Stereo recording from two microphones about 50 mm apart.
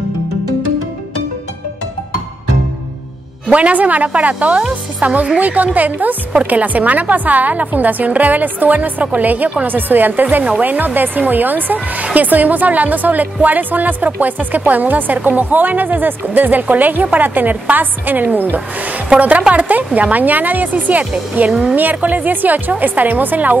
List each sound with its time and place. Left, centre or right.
3.4 s a woman's voice: right
21.5 s a woman's voice: centre
21.7 s speech: right